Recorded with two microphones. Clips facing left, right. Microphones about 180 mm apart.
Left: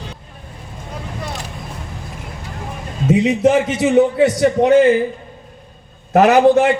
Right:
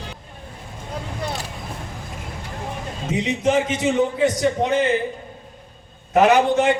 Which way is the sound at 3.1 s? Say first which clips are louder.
Left 6 dB; 70° left (ahead or behind).